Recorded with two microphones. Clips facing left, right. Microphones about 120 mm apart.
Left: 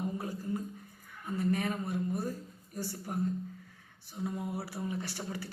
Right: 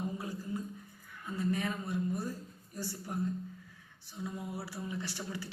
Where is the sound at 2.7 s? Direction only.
50° left (ahead or behind).